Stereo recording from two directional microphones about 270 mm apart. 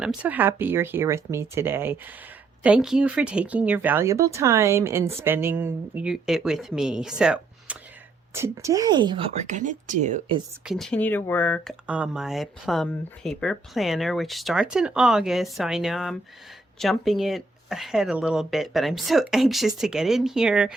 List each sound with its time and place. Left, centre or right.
0.0 s speech: centre; by 10.4 s right
10.7 s speech: centre